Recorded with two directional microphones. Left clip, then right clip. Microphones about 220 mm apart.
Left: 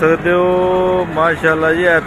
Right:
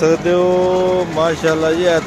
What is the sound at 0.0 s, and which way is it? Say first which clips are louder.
Speech: left 1 dB; 20° right (ahead or behind).